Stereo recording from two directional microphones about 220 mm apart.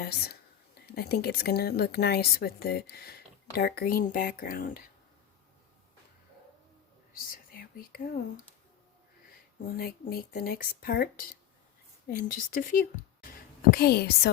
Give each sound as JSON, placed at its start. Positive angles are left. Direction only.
{"t": 0.0, "sound": "speech", "side_deg": 45}
{"t": 7.1, "sound": "whispering", "side_deg": 40}
{"t": 9.6, "sound": "speech", "side_deg": 40}